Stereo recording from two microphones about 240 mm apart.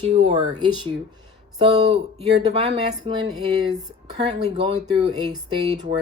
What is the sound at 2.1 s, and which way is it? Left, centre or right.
Speech, right.